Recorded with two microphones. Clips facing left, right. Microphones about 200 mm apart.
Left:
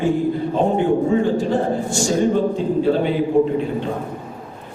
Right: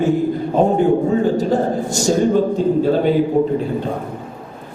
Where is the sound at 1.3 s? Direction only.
40° right (ahead or behind).